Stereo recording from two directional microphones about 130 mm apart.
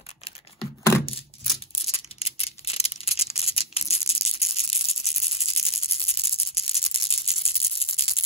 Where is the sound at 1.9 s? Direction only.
50° left (ahead or behind).